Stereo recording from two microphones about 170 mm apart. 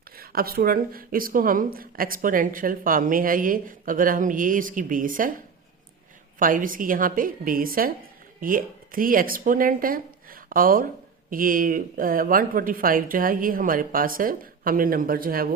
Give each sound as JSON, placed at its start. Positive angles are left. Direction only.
{"t": 0.2, "sound": "speech", "side_deg": -60}
{"t": 6.4, "sound": "speech", "side_deg": -55}